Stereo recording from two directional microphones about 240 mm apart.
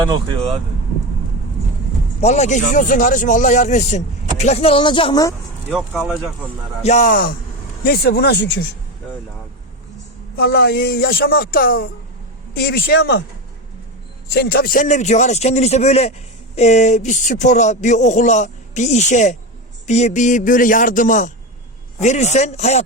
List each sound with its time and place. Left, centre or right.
0.1 s speech: right
2.2 s speech: left
5.9 s speech: centre
6.8 s a man's voice: left
10.3 s a man's voice: left
14.3 s a man's voice: left